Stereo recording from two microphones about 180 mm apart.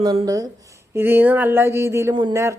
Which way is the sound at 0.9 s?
10° right (ahead or behind).